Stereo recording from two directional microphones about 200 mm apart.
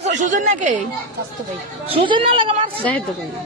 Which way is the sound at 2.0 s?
25° right (ahead or behind).